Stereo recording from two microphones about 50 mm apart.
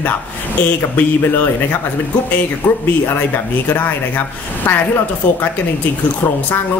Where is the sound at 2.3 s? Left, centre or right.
Left.